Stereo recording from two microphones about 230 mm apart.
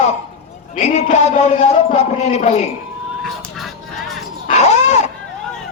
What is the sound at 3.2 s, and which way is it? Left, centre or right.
Vehicle, centre.